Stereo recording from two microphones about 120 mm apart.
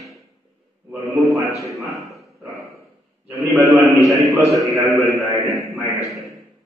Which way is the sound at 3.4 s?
25° right (ahead or behind).